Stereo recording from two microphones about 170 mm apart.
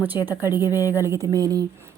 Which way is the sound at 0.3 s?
10° right (ahead or behind).